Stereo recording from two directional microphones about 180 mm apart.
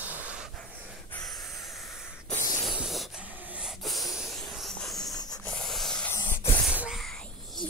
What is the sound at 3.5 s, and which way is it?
Wheeze, centre (ahead or behind).